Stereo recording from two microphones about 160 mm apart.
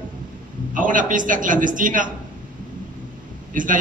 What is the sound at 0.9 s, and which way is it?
A man's voice, 55° right (ahead or behind).